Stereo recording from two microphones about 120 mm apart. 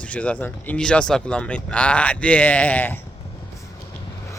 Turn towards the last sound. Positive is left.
turn(degrees=15)  # may be behind; listen again after turning